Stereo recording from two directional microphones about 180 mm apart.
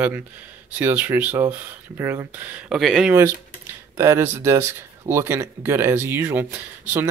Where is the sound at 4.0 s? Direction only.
15° right (ahead or behind).